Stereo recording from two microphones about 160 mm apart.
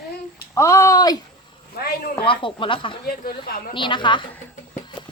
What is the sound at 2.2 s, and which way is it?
A woman's voice, 30° left (ahead or behind).